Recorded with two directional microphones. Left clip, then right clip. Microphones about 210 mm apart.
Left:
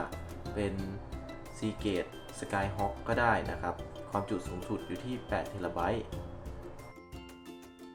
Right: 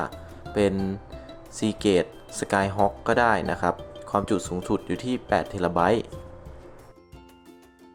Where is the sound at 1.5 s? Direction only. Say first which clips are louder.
Right 12 dB; 60° right (ahead or behind).